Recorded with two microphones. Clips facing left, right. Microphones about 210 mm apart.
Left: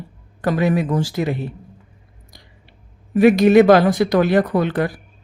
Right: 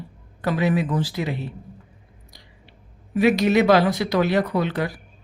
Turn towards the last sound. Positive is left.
turn(degrees=50)  # may be behind; listen again after turning